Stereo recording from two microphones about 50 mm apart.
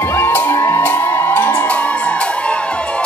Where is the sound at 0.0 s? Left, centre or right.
Left.